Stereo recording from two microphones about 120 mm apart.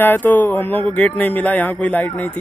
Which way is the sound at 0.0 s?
15° left (ahead or behind).